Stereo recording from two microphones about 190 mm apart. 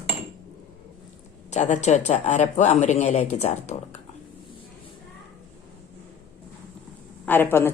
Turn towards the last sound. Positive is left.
turn(degrees=10)  # may be behind; listen again after turning